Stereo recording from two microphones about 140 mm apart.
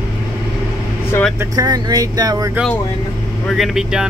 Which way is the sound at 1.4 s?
25° right (ahead or behind).